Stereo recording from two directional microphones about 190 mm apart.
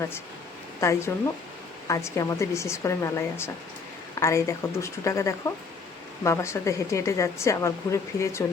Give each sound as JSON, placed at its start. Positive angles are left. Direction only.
{"t": 0.8, "sound": "speech", "side_deg": 15}